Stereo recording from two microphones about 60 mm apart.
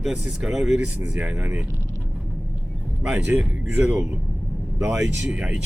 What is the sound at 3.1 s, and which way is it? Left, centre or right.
Speech, right.